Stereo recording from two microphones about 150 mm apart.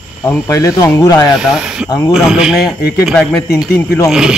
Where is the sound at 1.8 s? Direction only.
25° left (ahead or behind).